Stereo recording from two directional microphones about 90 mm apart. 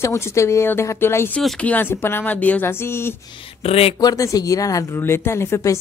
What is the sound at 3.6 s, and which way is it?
Speech, 90° left.